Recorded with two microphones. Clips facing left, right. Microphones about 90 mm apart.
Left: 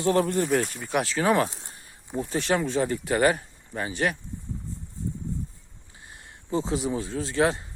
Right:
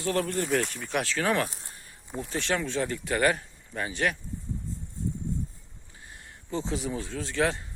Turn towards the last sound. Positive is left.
turn(degrees=10)  # may be behind; listen again after turning